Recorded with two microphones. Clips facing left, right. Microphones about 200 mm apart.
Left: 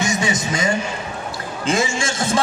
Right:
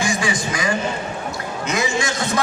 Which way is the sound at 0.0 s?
20° left (ahead or behind).